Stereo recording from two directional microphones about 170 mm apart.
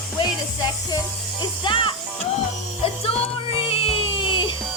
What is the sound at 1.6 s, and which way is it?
Music, 30° left (ahead or behind).